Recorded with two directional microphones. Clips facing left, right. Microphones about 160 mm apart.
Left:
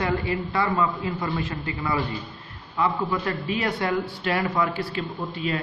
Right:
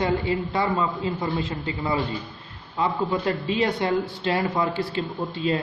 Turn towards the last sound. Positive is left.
turn(degrees=-30)  # may be behind; listen again after turning